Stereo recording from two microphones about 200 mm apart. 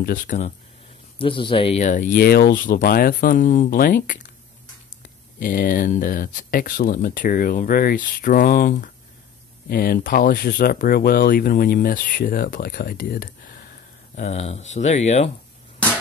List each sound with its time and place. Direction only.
0.0 s speech: 45° left (ahead or behind)
1.1 s speech: 25° left (ahead or behind); by 13.7 s 45° left (ahead or behind)
14.1 s speech: 35° left (ahead or behind)